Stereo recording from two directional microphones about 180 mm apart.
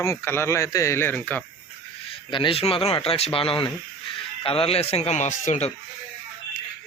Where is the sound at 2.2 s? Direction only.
30° left (ahead or behind).